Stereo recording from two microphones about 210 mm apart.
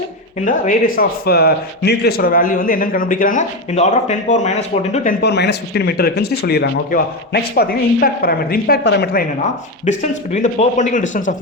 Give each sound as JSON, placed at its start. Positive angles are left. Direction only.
{"t": 0.4, "sound": "speech", "side_deg": 40}
{"t": 5.2, "sound": "speech", "side_deg": 55}
{"t": 10.3, "sound": "speech", "side_deg": 35}